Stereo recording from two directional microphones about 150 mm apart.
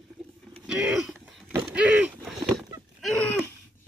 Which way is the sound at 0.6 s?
5° right (ahead or behind).